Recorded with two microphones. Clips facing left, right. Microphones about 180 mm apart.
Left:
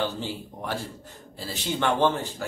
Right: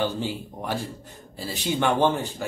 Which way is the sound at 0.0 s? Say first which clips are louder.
Right 3 dB; 15° right (ahead or behind).